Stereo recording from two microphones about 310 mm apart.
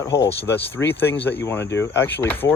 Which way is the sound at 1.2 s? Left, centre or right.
Centre.